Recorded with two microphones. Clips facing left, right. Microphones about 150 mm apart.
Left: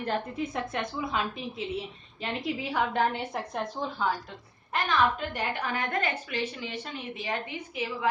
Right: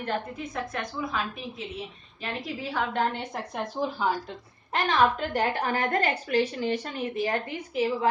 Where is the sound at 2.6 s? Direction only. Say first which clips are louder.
Even; 15° left (ahead or behind).